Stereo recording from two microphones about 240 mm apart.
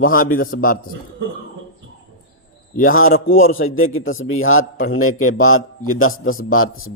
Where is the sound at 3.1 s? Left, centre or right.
Left.